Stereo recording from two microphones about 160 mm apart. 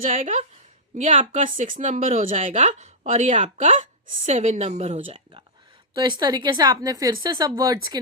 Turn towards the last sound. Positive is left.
turn(degrees=-25)  # may be behind; listen again after turning